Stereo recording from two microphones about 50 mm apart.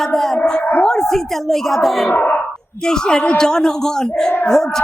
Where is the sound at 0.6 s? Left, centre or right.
Left.